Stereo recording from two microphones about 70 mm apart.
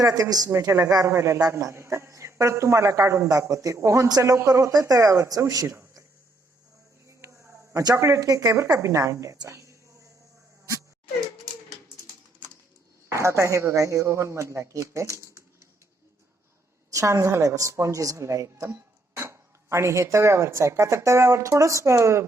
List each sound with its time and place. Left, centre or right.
0.0 s speech: right
0.5 s speech: right
7.1 s a sound: right
7.9 s a woman's voice: right
13.1 s speech: right
16.9 s speech: right
18.7 s speech: right